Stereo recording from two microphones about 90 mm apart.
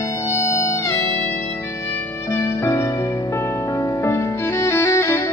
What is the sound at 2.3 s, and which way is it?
Music, 35° left (ahead or behind).